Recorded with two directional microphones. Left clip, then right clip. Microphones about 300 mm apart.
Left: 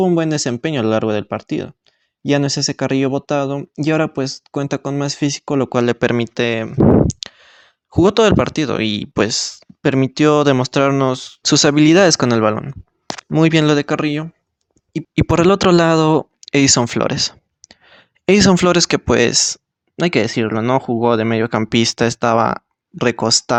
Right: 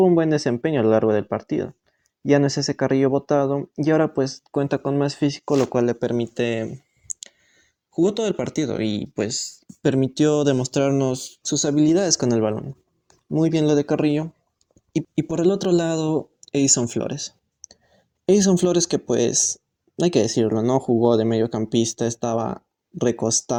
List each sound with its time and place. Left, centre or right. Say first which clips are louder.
0.0 s speech: left 1 dB; left
7.3 s clicking: left 13 dB; left
7.9 s speech: left 9 dB; left
12.0 s speech: left 7 dB; left
13.5 s speech: left 5 dB; left
13.7 s speech: left 2 dB; left
20.5 s speech: left 3 dB; left
21.9 s speech: left 9 dB; left